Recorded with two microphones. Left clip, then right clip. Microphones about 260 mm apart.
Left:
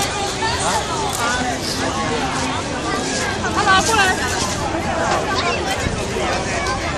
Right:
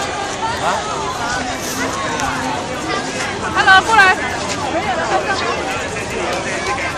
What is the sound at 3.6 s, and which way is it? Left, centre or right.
Speech, right.